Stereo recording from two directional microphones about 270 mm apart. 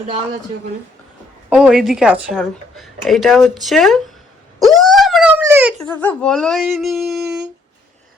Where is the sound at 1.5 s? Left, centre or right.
Centre.